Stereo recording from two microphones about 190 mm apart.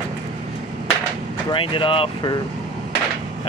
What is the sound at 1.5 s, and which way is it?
Speech, 25° left (ahead or behind).